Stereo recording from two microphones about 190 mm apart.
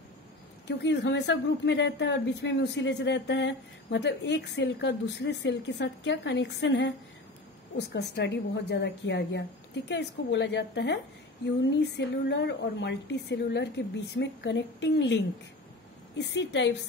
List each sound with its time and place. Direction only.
0.7 s a woman's voice: 65° left (ahead or behind)
16.2 s a woman's voice: 65° left (ahead or behind)